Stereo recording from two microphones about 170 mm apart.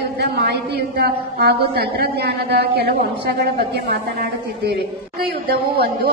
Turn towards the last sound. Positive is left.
turn(degrees=-65)  # may be behind; listen again after turning